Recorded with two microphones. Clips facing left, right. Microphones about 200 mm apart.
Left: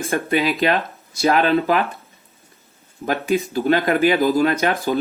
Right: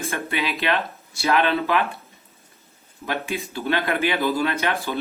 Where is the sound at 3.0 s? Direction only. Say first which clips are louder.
Left 8 dB; 40° left (ahead or behind).